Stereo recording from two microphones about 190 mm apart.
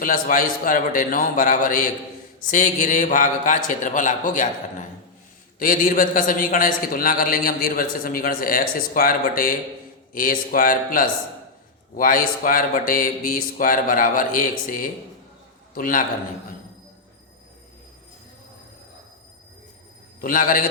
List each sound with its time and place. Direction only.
0.0 s a man's voice: 45° left (ahead or behind)
5.5 s a man's voice: 45° left (ahead or behind)
20.2 s a man's voice: 45° left (ahead or behind)